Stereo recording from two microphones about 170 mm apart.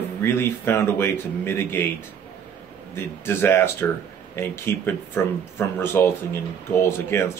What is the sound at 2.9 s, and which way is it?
A man's voice, 15° left (ahead or behind).